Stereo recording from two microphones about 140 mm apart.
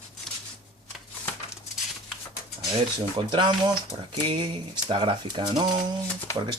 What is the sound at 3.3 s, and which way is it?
Speech, 35° right (ahead or behind).